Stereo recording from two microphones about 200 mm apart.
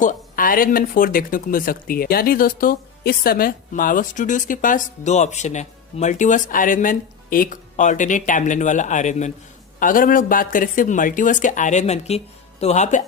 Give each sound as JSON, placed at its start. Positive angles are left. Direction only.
{"t": 0.0, "sound": "speech", "side_deg": 40}